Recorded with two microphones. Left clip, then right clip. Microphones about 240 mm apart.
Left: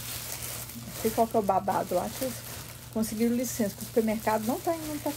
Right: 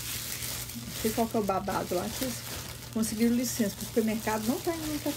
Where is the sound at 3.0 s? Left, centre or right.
Centre.